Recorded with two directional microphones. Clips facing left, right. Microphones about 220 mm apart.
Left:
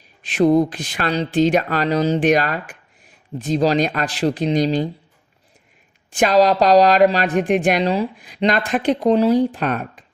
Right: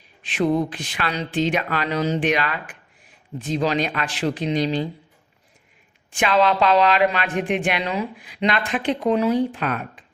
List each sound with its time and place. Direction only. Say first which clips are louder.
0.2 s a woman's voice: left 6 dB; 40° left (ahead or behind)
6.1 s a woman's voice: left 4 dB; 40° left (ahead or behind)